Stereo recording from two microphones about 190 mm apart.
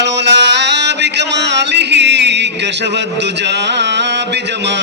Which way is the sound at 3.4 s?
65° right (ahead or behind).